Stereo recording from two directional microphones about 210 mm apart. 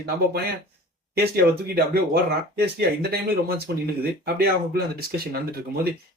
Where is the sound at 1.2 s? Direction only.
50° right (ahead or behind).